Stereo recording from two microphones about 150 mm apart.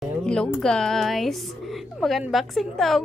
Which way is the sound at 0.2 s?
5° left (ahead or behind).